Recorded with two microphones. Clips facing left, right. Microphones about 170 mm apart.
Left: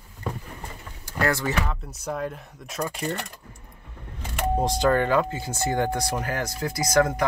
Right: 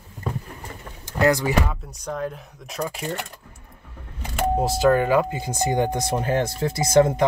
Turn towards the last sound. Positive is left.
turn(degrees=-25)  # may be behind; listen again after turning